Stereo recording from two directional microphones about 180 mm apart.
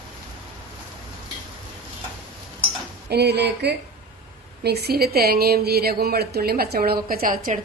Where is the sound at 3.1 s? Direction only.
65° right (ahead or behind).